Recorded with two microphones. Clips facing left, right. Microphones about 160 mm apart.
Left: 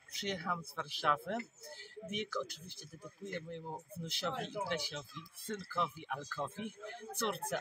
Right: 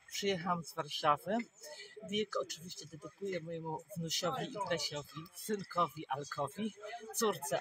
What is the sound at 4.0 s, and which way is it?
Speech, 40° right (ahead or behind).